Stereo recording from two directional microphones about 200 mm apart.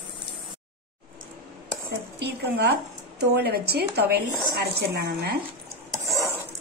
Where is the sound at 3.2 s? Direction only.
55° right (ahead or behind).